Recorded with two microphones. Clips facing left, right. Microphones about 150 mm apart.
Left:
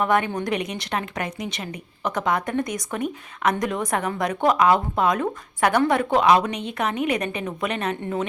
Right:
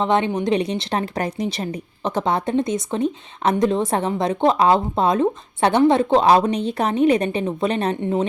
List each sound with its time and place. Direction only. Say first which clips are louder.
0.0 s speech: right 3 dB; 25° right (ahead or behind)